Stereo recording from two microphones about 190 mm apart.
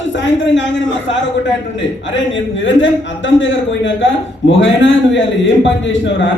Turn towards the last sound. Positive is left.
turn(degrees=75)  # may be behind; listen again after turning